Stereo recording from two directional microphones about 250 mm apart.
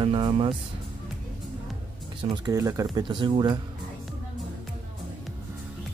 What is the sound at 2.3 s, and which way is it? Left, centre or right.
Speech, centre.